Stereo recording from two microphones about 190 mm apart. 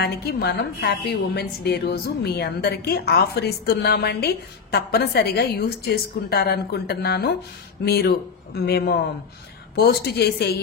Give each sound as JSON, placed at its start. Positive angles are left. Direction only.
{"t": 0.0, "sound": "a woman's voice", "side_deg": 55}